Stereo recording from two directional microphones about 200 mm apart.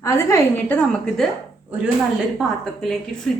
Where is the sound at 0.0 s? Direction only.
15° left (ahead or behind).